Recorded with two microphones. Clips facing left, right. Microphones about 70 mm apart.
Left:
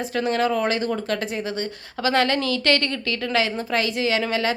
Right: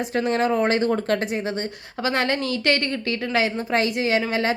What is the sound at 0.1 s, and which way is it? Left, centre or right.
A woman's voice, right.